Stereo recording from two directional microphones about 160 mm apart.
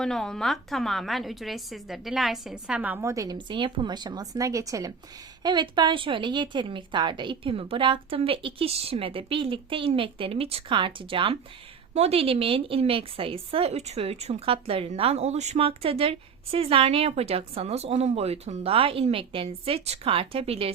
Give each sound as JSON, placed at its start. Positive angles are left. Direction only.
{"t": 0.0, "sound": "a woman's voice", "side_deg": 5}